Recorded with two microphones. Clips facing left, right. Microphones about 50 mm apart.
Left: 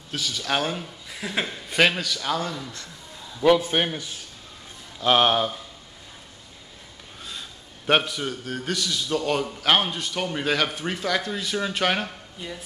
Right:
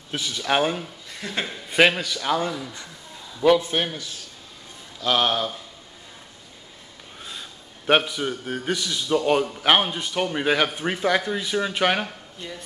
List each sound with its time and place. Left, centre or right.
0.1 s a man's voice: centre
1.1 s chuckle: centre
1.7 s a man's voice: centre
3.6 s a man's voice: centre
5.0 s speech: left
7.2 s a man's voice: centre
12.4 s chuckle: centre